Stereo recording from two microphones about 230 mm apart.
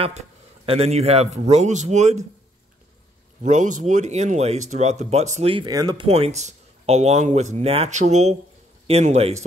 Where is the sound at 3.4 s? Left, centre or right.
Right.